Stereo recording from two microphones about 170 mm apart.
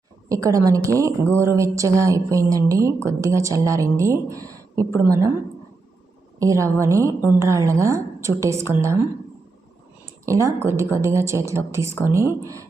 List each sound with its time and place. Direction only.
0.3 s a woman's voice: 20° right (ahead or behind)
6.4 s a woman's voice: 20° right (ahead or behind)
10.2 s a woman's voice: 15° right (ahead or behind)